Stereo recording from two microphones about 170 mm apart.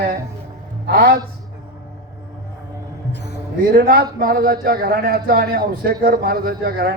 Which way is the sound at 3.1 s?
80° left.